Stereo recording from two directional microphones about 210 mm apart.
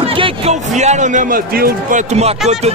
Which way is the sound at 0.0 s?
25° right (ahead or behind).